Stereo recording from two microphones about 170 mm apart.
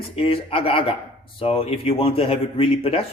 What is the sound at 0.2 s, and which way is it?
A man's voice, 35° left (ahead or behind).